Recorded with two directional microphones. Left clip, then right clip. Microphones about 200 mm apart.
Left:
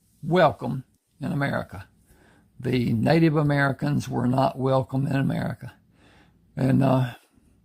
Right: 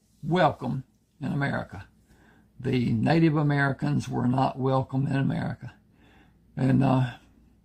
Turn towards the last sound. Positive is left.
turn(degrees=45)  # may be behind; listen again after turning